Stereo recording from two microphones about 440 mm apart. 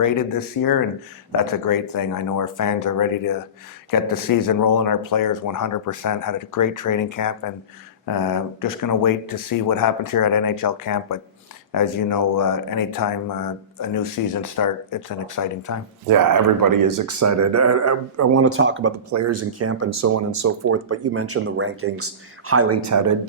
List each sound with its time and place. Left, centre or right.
0.0 s speech: left
16.0 s speech: right